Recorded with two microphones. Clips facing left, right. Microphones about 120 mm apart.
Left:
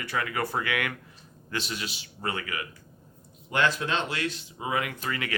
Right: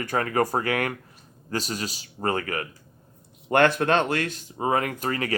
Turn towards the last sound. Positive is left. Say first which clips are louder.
# right 6 dB
turn(degrees=-40)  # may be behind; listen again after turning